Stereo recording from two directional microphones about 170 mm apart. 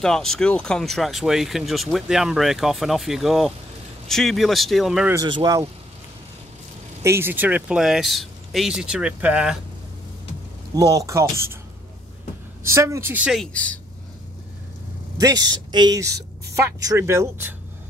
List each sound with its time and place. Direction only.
0.0 s speech: 5° left (ahead or behind)
5.1 s a man's voice: 25° right (ahead or behind)
7.0 s speech: 15° right (ahead or behind)
10.8 s a woman's voice: 20° right (ahead or behind)
12.6 s a woman's voice: 15° right (ahead or behind); by 13.7 s 5° left (ahead or behind)
15.1 s a man's voice: 20° right (ahead or behind)